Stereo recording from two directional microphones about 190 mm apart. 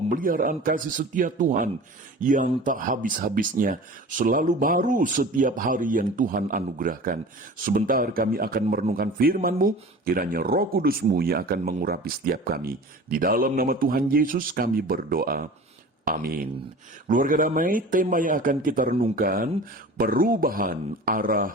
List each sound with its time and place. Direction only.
0.1 s speech: 45° right (ahead or behind)